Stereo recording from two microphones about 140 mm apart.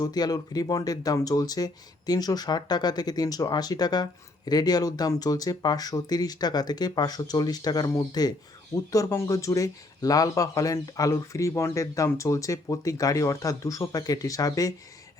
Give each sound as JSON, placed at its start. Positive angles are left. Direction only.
{"t": 0.0, "sound": "speech", "side_deg": 30}